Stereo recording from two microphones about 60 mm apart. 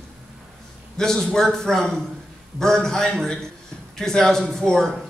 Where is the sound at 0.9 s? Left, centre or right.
Centre.